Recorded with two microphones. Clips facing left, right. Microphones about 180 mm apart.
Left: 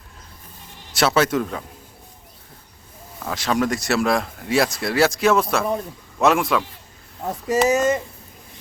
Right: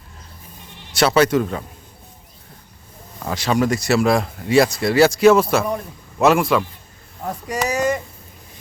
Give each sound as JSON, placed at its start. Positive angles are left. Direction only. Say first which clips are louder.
{"t": 0.9, "sound": "speech", "louder": "right 3 dB", "side_deg": 0}
{"t": 3.2, "sound": "speech", "louder": "right 2 dB", "side_deg": 0}
{"t": 7.4, "sound": "speech", "louder": "left 6 dB", "side_deg": 25}